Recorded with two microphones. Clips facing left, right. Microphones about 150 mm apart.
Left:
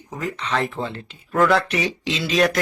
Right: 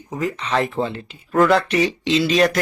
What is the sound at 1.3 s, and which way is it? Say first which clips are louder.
Speech: right 3 dB; centre (ahead or behind).